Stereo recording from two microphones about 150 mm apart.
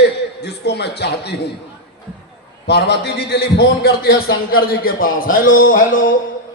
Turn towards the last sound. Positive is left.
turn(degrees=65)  # may be behind; listen again after turning